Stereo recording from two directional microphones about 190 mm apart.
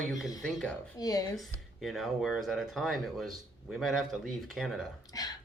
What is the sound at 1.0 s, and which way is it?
Speech, 20° left (ahead or behind).